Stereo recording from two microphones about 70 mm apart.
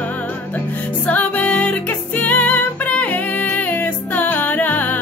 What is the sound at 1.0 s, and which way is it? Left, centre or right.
Music, left.